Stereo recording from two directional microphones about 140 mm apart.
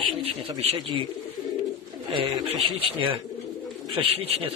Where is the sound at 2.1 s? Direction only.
40° right (ahead or behind).